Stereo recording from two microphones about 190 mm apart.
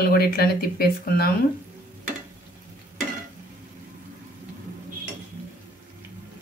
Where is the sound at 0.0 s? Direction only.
55° left (ahead or behind).